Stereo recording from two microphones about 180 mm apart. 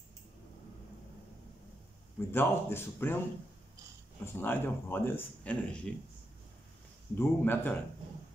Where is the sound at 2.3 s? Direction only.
10° left (ahead or behind).